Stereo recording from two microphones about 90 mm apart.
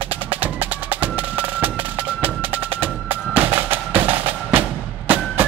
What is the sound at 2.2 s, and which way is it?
Music, 20° right (ahead or behind).